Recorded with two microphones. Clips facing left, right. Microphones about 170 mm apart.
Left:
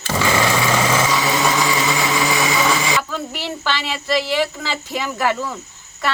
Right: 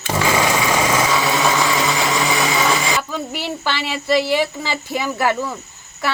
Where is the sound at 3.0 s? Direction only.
15° right (ahead or behind).